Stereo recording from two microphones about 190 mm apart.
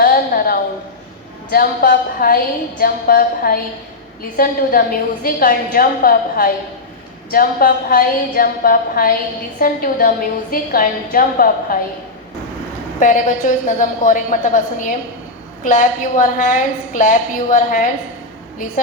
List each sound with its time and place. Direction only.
0.0 s a sound: 50° left (ahead or behind)
1.5 s a woman's voice: 55° left (ahead or behind)
13.0 s a woman's voice: 45° left (ahead or behind)